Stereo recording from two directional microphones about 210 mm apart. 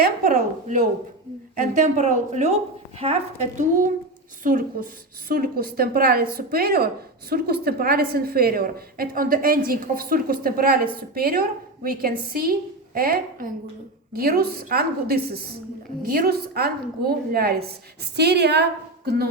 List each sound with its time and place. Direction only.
0.0 s a woman's voice: 40° right (ahead or behind)